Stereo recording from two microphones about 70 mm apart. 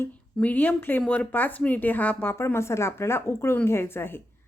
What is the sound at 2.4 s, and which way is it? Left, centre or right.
A woman's voice, left.